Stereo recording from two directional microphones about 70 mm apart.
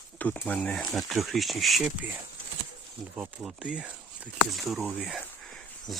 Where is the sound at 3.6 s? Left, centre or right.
Centre.